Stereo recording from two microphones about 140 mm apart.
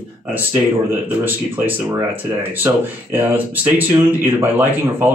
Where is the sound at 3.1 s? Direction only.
15° right (ahead or behind).